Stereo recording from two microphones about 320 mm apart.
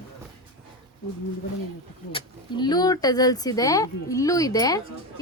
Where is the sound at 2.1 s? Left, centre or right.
Centre.